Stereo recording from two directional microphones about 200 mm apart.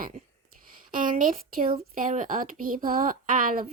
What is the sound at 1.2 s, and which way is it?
Speech, 45° right (ahead or behind).